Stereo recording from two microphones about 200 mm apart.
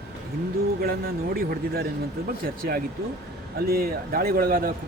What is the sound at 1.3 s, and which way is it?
Speech, 50° right (ahead or behind).